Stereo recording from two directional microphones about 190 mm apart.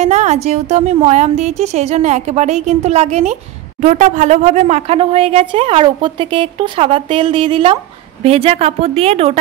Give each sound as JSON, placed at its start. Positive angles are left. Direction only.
{"t": 0.0, "sound": "speech", "side_deg": -35}